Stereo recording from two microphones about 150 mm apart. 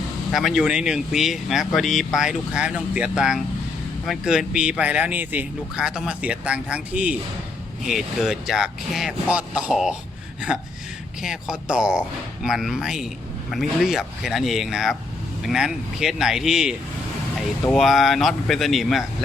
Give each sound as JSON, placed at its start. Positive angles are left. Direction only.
{"t": 0.3, "sound": "speech", "side_deg": 0}
{"t": 11.2, "sound": "speech", "side_deg": -5}